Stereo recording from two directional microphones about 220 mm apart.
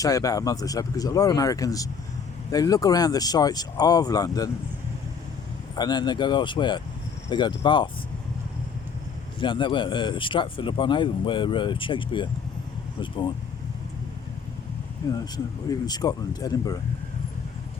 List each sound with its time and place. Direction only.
0.0 s speech: 15° left (ahead or behind)
5.7 s speech: 20° left (ahead or behind)
9.4 s speech: 20° left (ahead or behind)
15.9 s speech: 20° left (ahead or behind)